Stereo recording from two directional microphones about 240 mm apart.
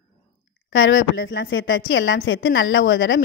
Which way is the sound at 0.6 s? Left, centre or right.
Left.